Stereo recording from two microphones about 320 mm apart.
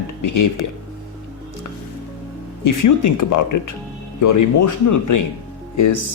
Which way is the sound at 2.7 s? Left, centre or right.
Left.